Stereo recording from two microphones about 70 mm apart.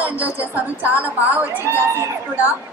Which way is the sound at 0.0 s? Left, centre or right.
Right.